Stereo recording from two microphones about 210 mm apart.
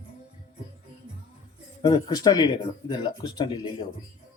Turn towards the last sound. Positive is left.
turn(degrees=20)  # may be behind; listen again after turning